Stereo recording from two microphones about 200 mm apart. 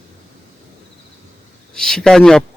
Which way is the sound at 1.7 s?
5° left (ahead or behind).